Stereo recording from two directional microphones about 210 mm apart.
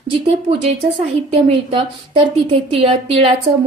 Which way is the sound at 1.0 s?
25° right (ahead or behind).